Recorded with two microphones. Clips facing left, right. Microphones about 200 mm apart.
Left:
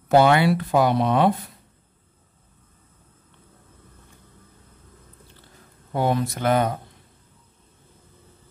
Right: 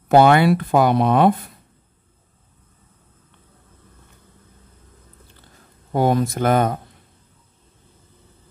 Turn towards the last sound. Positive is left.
turn(degrees=-50)  # may be behind; listen again after turning